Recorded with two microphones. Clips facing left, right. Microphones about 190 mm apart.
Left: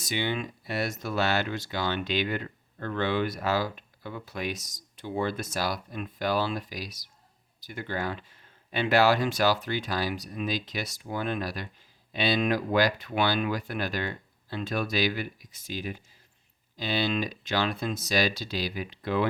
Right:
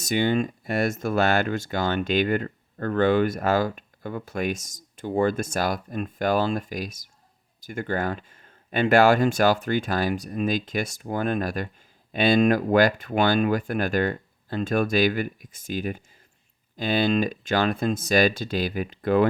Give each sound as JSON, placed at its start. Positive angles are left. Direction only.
{"t": 0.0, "sound": "speech", "side_deg": -45}